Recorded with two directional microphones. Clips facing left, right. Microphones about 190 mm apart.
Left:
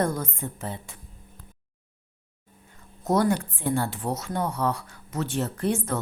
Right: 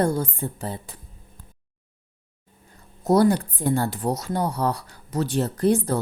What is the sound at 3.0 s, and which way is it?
Speech, 35° right (ahead or behind).